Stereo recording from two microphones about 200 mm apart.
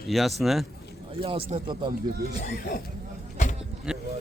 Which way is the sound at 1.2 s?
30° right (ahead or behind).